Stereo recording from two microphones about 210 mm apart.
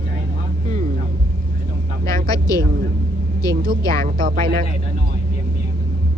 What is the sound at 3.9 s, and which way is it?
Speech, 40° right (ahead or behind).